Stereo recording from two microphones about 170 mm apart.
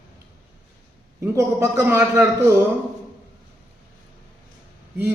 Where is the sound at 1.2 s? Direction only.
15° right (ahead or behind).